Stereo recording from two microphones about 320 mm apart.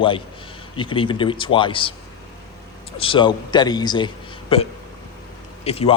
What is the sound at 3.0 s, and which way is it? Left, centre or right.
A man's voice, centre.